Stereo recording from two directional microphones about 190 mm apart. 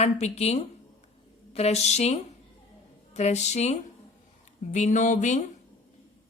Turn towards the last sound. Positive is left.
turn(degrees=40)  # may be behind; listen again after turning